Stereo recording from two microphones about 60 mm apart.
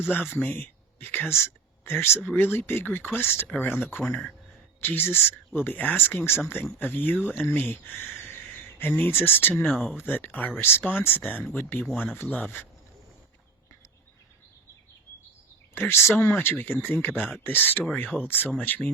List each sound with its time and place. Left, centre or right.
0.1 s speech: left
0.5 s a sound: left
2.2 s speech: left
4.0 s speech: centre
4.8 s speech: left
8.2 s a sound: left
10.0 s speech: left
15.7 s speech: left